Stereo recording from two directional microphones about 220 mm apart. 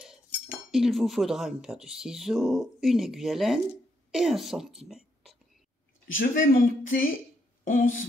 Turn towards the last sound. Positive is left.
turn(degrees=40)  # may be behind; listen again after turning